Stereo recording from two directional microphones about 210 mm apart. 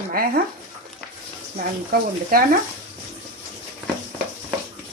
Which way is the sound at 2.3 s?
45° right (ahead or behind).